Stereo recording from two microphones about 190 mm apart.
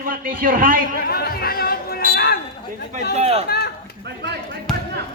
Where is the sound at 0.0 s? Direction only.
45° right (ahead or behind).